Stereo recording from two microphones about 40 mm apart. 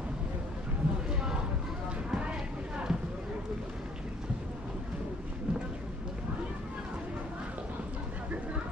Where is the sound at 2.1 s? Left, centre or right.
Right.